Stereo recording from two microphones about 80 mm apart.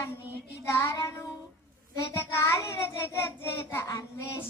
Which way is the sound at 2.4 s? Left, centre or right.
Left.